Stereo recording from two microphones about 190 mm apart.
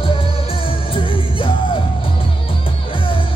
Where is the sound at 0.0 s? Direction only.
30° left (ahead or behind).